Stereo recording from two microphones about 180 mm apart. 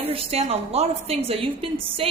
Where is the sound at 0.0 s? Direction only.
30° right (ahead or behind).